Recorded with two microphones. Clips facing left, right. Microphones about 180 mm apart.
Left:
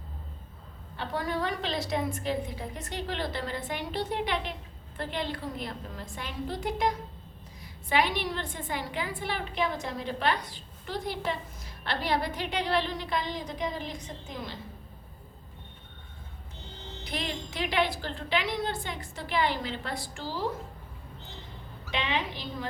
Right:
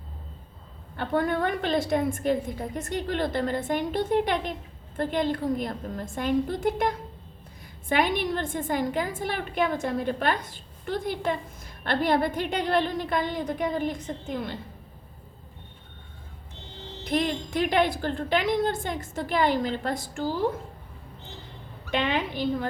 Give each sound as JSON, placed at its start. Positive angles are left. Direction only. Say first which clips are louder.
{"t": 0.9, "sound": "a woman's voice", "louder": "right 6 dB", "side_deg": -55}
{"t": 17.0, "sound": "a woman's voice", "louder": "right 9 dB", "side_deg": -50}
{"t": 21.8, "sound": "a woman's voice", "louder": "right 5 dB", "side_deg": -50}